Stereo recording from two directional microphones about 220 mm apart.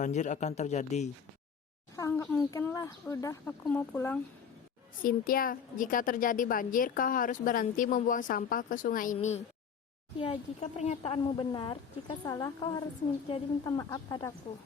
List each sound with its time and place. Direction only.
0.0 s a woman's voice: 35° left (ahead or behind)
2.0 s speech: 10° left (ahead or behind)
5.0 s a woman's voice: 40° left (ahead or behind); by 14.3 s 15° left (ahead or behind)